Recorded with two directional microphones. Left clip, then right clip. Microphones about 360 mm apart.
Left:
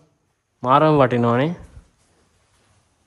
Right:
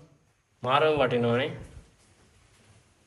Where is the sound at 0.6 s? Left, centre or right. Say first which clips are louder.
Left 8 dB; centre.